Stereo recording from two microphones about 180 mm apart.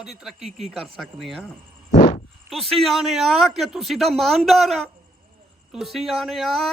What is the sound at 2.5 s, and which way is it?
Speech, centre (ahead or behind).